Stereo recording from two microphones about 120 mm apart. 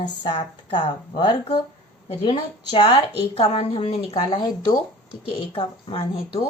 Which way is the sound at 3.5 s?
50° left (ahead or behind).